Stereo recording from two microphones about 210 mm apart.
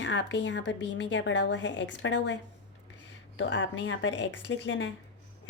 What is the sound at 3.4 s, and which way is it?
A woman's voice, 60° left (ahead or behind).